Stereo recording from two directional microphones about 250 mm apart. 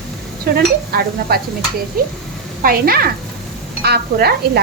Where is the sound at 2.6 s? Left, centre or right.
Right.